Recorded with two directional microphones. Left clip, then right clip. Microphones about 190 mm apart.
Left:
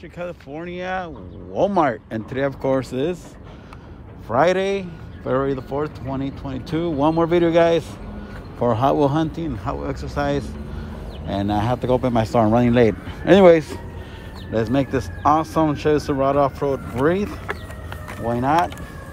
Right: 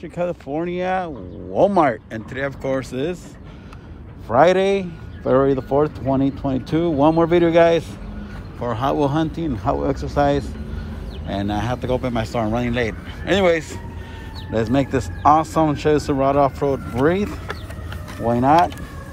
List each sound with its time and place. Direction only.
0.2 s speech: 5° left (ahead or behind)
2.3 s speech: 25° left (ahead or behind)
4.3 s speech: 10° left (ahead or behind)
8.5 s speech: 30° left (ahead or behind)
14.5 s speech: 15° left (ahead or behind)